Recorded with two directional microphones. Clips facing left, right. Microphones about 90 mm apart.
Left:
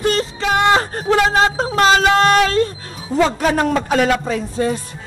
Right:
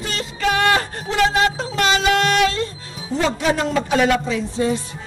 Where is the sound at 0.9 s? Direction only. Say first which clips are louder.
Left 3 dB; 40° left (ahead or behind).